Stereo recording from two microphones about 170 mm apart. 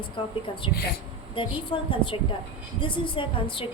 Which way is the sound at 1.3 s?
30° left (ahead or behind).